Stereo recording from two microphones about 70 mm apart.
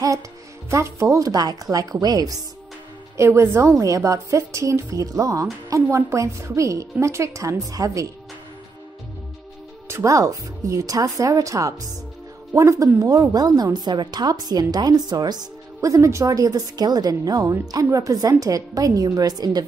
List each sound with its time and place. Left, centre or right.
0.7 s a woman's voice: right
3.2 s a woman's voice: right
9.8 s a woman's voice: right
13.7 s a woman's voice: right
15.8 s a woman's voice: right